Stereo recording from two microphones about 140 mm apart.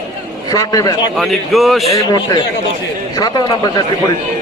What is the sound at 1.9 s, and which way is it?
A man's voice, 25° left (ahead or behind).